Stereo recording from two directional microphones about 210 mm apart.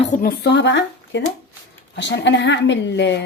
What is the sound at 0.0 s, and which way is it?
Speech, 40° left (ahead or behind).